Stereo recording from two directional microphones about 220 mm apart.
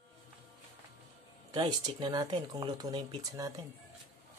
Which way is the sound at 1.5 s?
20° right (ahead or behind).